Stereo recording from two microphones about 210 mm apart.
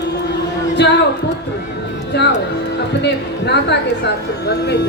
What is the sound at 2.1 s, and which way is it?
Speech, 55° left (ahead or behind).